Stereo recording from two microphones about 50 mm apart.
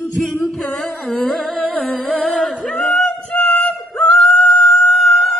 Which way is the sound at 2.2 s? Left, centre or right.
Centre.